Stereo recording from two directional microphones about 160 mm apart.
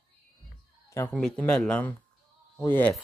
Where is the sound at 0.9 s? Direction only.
10° left (ahead or behind).